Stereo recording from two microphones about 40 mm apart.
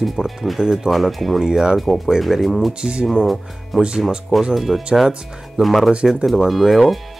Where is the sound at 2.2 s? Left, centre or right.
Centre.